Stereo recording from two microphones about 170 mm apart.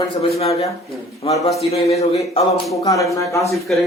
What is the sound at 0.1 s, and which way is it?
Speech, 35° left (ahead or behind).